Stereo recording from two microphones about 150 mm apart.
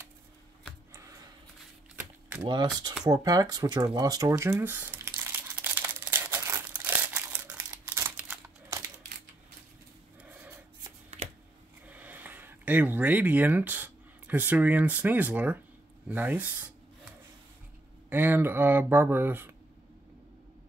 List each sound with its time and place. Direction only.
2.4 s speech: 30° right (ahead or behind)
3.1 s a sound: 25° right (ahead or behind)
7.9 s crumpling: 20° right (ahead or behind)
10.2 s a sound: 15° right (ahead or behind)
11.9 s speech: 10° right (ahead or behind)
18.1 s speech: 15° right (ahead or behind)